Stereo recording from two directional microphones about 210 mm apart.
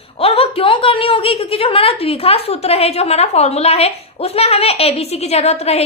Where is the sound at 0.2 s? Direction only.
25° left (ahead or behind).